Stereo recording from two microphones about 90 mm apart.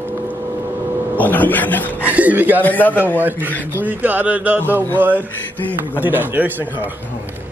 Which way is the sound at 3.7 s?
20° right (ahead or behind).